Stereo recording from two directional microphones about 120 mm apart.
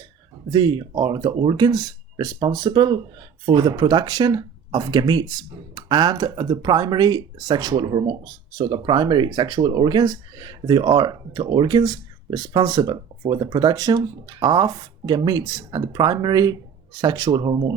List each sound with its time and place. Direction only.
0.5 s speech: 40° right (ahead or behind)